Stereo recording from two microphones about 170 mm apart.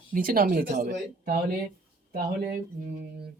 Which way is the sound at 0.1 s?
55° right (ahead or behind).